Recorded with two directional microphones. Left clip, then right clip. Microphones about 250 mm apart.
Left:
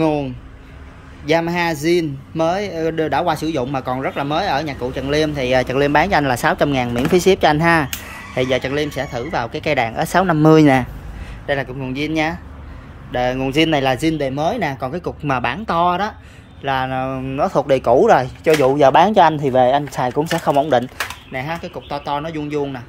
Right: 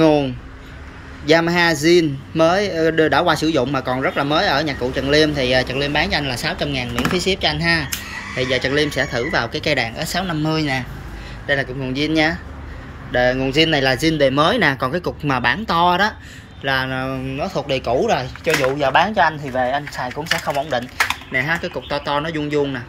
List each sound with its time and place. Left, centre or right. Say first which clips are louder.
0.0 s a sound: right 4 dB; centre
1.2 s a man's voice: right 3 dB; centre; by 10.9 s left
11.4 s a man's voice: right 1 dB; centre
17.4 s speech: left 7 dB; left
21.3 s speech: right 5 dB; centre